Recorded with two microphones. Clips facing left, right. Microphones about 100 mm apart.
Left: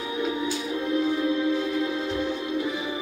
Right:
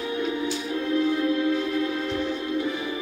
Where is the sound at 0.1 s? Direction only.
15° left (ahead or behind).